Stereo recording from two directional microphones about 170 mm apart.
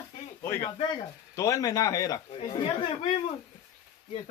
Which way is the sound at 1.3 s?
20° left (ahead or behind).